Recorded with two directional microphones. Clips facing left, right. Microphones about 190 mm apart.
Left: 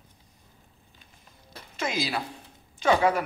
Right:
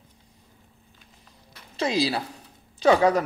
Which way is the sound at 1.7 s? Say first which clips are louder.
Right 5 dB; 35° right (ahead or behind).